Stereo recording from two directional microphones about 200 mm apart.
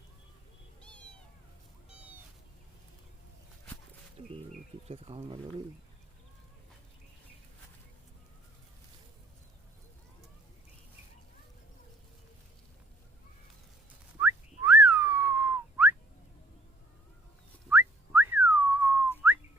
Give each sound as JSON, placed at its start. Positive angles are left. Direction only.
{"t": 0.8, "sound": "cat", "side_deg": 5}
{"t": 1.9, "sound": "cat", "side_deg": -5}
{"t": 4.9, "sound": "speech", "side_deg": -25}
{"t": 14.2, "sound": "whistling", "side_deg": -10}
{"t": 17.7, "sound": "whistling", "side_deg": -10}